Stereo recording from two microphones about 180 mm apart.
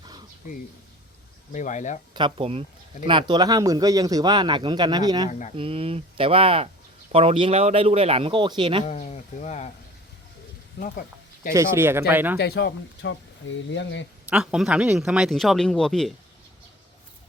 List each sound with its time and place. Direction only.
1.5 s speech: 45° left (ahead or behind)
2.1 s speech: 30° right (ahead or behind)
8.9 s speech: 40° left (ahead or behind)
10.8 s speech: 55° left (ahead or behind)
11.5 s speech: 15° right (ahead or behind)
12.4 s speech: 70° left (ahead or behind); by 14.1 s 85° left
14.3 s speech: 5° right (ahead or behind)